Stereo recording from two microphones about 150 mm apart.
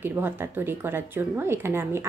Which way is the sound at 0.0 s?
15° right (ahead or behind).